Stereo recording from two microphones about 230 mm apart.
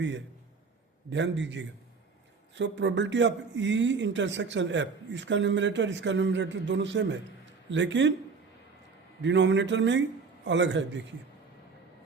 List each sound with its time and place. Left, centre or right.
1.1 s a man's voice: right
9.2 s a man's voice: right